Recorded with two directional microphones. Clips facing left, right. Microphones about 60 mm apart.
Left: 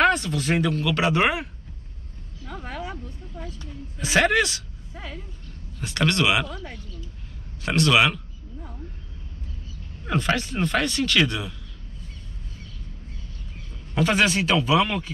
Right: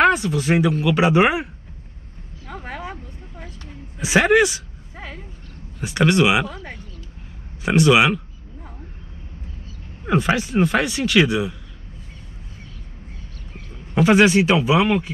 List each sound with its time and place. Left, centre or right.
0.0 s speech: centre
2.4 s a sound: right
4.0 s a sound: centre
5.8 s speech: centre
7.6 s speech: centre
10.0 s speech: centre
13.9 s speech: centre